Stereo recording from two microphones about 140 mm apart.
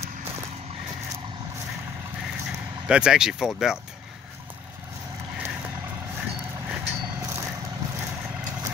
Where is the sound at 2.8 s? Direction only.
5° right (ahead or behind).